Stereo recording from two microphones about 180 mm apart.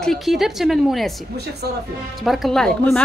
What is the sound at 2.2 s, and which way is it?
Speech, centre (ahead or behind).